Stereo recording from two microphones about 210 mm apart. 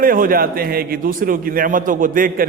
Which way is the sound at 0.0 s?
40° right (ahead or behind).